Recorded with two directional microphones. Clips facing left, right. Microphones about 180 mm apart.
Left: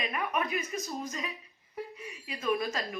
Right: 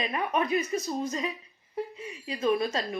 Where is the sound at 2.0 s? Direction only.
25° right (ahead or behind).